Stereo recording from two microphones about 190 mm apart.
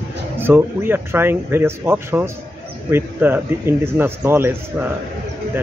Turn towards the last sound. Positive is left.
turn(degrees=-10)  # may be behind; listen again after turning